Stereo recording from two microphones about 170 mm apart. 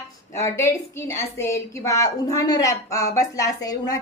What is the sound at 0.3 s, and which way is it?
A woman's voice, 15° left (ahead or behind).